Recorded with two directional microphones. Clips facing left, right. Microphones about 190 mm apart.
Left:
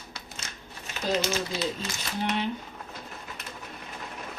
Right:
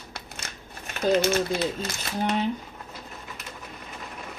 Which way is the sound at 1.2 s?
50° right (ahead or behind).